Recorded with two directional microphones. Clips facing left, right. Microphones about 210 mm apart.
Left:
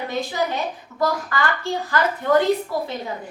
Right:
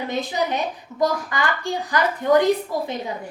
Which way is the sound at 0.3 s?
20° right (ahead or behind).